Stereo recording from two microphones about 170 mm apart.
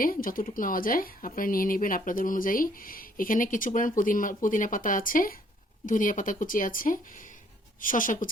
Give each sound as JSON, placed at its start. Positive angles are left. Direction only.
{"t": 0.0, "sound": "speech", "side_deg": 55}